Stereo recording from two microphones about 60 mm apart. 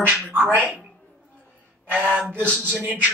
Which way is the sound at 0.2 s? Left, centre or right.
Right.